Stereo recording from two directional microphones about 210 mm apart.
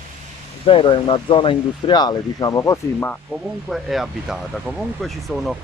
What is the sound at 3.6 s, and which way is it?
Speech, centre (ahead or behind).